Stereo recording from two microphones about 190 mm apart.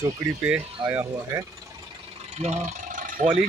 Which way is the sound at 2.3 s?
35° right (ahead or behind).